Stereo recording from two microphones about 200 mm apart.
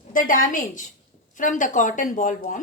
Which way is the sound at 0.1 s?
40° left (ahead or behind).